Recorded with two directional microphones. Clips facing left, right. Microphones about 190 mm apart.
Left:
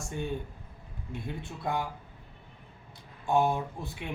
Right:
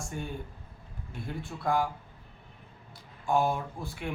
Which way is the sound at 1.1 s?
20° left (ahead or behind).